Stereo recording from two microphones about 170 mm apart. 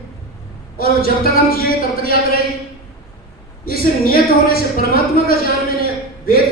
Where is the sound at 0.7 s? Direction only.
60° left (ahead or behind).